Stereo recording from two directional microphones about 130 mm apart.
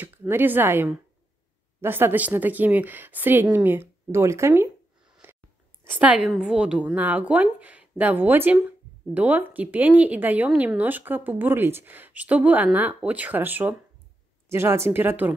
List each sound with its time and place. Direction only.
0.0 s a woman's voice: 15° right (ahead or behind)
5.2 s a sound: 15° right (ahead or behind)
5.9 s speech: 10° right (ahead or behind)